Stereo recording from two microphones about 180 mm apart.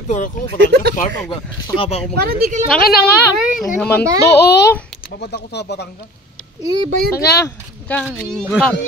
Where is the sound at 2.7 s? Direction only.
55° left (ahead or behind).